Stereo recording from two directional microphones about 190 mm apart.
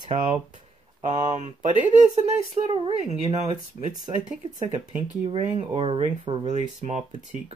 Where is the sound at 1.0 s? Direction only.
40° right (ahead or behind).